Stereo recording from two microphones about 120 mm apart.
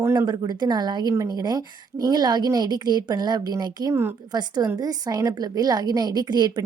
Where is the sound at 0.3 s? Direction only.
35° right (ahead or behind).